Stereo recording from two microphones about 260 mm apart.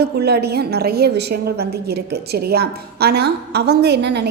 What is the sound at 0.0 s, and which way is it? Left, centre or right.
A woman's voice, right.